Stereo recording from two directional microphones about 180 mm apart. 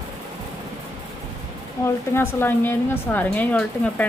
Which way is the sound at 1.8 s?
15° left (ahead or behind).